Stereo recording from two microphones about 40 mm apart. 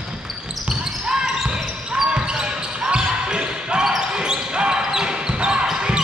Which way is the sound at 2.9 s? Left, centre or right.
Centre.